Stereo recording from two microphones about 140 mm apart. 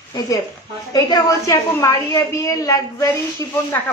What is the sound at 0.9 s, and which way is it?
A woman's voice, 30° left (ahead or behind).